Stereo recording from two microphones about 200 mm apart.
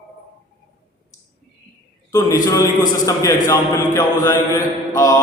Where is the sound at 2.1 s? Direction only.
15° left (ahead or behind).